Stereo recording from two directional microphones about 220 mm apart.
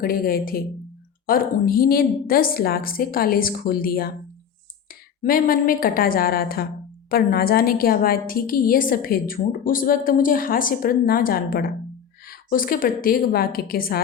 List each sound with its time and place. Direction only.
0.0 s a woman's voice: 40° left (ahead or behind)